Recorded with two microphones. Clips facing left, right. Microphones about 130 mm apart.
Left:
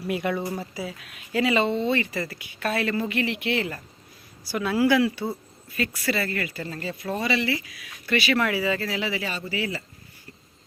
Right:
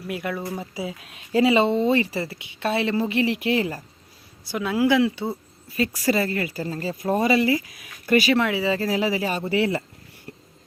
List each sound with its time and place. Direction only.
0.1 s speech: centre (ahead or behind)
0.6 s speech: 20° right (ahead or behind)
4.5 s speech: 15° right (ahead or behind)
5.6 s speech: 35° right (ahead or behind)
8.4 s speech: 20° right (ahead or behind); by 9.4 s 40° right (ahead or behind)
9.4 s speech: 60° right (ahead or behind)